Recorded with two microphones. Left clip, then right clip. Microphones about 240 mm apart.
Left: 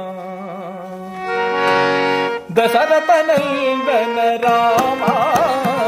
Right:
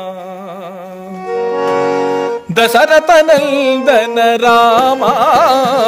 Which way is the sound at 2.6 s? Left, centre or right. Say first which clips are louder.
Right 5 dB; right.